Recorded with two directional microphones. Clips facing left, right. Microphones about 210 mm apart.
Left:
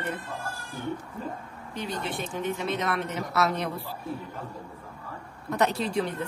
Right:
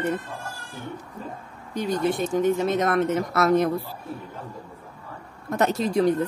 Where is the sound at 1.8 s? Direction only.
45° right (ahead or behind).